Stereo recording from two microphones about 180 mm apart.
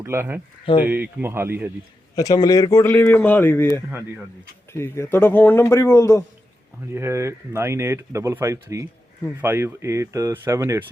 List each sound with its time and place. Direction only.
0.0 s speech: 15° right (ahead or behind)
0.7 s speech: 30° left (ahead or behind)
1.2 s speech: 10° right (ahead or behind)
2.1 s speech: 20° left (ahead or behind)
6.9 s speech: 15° right (ahead or behind)